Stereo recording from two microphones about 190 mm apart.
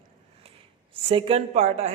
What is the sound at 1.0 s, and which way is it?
Speech, 30° right (ahead or behind).